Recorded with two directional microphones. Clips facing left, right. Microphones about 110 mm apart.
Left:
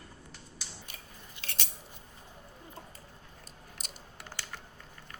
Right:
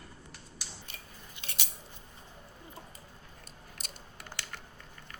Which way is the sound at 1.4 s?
10° right (ahead or behind).